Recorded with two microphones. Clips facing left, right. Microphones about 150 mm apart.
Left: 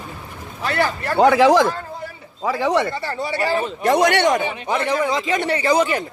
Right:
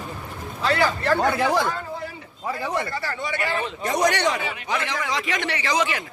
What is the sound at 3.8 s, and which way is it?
Speech, 65° left (ahead or behind).